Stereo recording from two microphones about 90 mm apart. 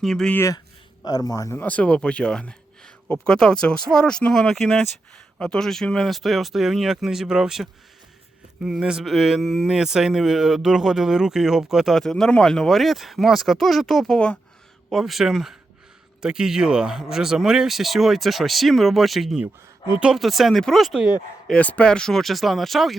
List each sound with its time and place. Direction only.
0.0 s speech: 5° left (ahead or behind)
1.0 s a man's voice: 45° left (ahead or behind)
1.5 s speech: 15° left (ahead or behind); by 21.5 s 5° right (ahead or behind)
21.5 s speech: 15° left (ahead or behind)